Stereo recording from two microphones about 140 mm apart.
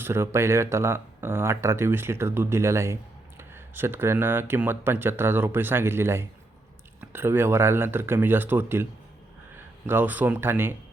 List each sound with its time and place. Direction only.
0.0 s speech: 20° right (ahead or behind)